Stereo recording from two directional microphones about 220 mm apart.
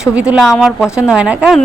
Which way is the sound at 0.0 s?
5° right (ahead or behind).